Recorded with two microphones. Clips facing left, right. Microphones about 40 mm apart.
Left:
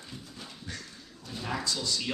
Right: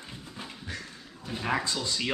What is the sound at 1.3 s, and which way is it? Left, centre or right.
Speech, right.